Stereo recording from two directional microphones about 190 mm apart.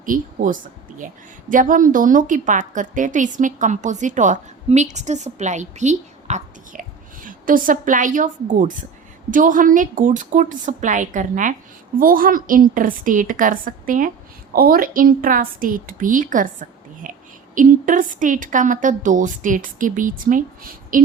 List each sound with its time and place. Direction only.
0.0 s a woman's voice: 45° right (ahead or behind)